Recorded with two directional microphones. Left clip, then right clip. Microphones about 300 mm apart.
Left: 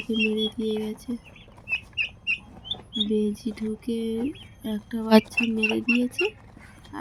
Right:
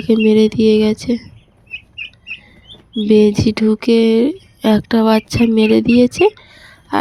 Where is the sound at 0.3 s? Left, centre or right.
Right.